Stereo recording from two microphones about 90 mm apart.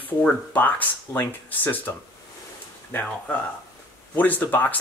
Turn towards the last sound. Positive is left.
turn(degrees=20)  # may be behind; listen again after turning